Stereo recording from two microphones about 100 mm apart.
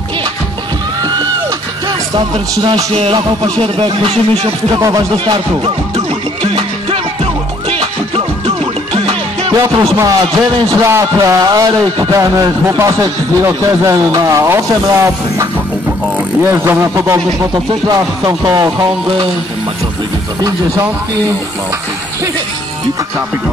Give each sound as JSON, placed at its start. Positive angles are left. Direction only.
{"t": 2.9, "sound": "music", "side_deg": -75}
{"t": 3.8, "sound": "speech", "side_deg": -65}
{"t": 4.7, "sound": "speech", "side_deg": -35}
{"t": 5.1, "sound": "speech", "side_deg": -55}
{"t": 5.9, "sound": "music", "side_deg": -65}
{"t": 8.5, "sound": "music", "side_deg": -70}
{"t": 9.6, "sound": "music", "side_deg": -30}
{"t": 11.4, "sound": "speech", "side_deg": -40}
{"t": 16.4, "sound": "speech", "side_deg": -25}
{"t": 20.4, "sound": "speech", "side_deg": -30}